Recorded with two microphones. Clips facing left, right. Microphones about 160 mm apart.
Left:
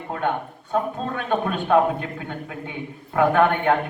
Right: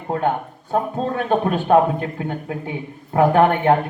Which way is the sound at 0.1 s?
40° right (ahead or behind).